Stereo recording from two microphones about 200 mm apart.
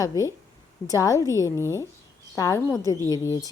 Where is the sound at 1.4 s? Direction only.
15° left (ahead or behind).